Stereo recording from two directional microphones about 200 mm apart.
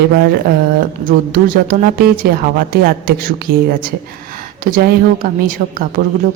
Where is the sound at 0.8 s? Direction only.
45° right (ahead or behind).